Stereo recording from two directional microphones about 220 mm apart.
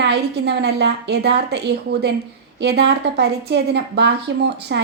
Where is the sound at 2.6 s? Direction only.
50° right (ahead or behind).